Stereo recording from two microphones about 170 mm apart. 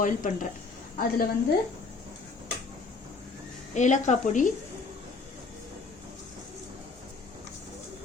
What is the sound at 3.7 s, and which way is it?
Speech, 45° left (ahead or behind).